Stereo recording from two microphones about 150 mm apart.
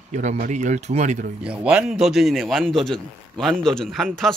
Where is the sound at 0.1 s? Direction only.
50° right (ahead or behind).